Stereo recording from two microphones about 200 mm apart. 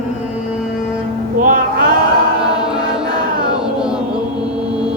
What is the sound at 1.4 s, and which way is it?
Music, 45° right (ahead or behind).